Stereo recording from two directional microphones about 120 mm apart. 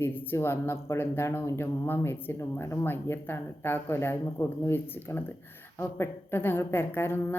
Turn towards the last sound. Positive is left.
turn(degrees=15)  # may be behind; listen again after turning